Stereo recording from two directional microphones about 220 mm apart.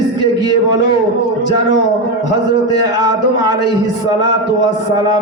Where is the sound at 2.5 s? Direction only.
20° right (ahead or behind).